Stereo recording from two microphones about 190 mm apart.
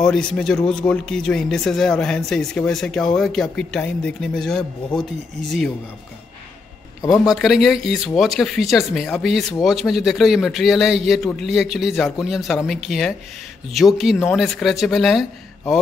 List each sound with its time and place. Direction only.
0.0 s speech: 5° left (ahead or behind)
7.1 s speech: centre (ahead or behind)